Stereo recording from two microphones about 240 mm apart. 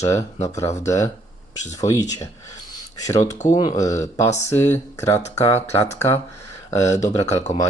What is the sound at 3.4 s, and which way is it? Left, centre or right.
Speech, left.